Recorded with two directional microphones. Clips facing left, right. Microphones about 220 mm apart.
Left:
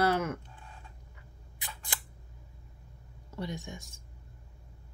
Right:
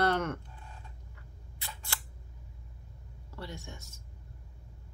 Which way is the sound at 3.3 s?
15° left (ahead or behind).